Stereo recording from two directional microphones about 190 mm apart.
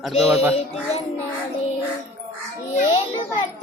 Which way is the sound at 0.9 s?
35° left (ahead or behind).